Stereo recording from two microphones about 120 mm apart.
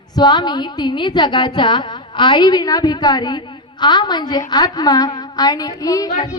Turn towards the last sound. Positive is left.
turn(degrees=30)  # may be behind; listen again after turning